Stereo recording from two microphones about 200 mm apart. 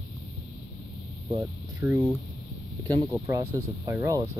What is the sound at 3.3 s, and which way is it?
Speech, 15° right (ahead or behind).